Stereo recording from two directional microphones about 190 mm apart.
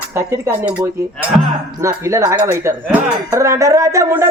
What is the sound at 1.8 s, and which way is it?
Speech, 15° right (ahead or behind).